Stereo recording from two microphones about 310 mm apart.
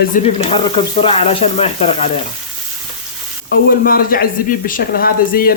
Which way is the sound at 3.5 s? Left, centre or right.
Left.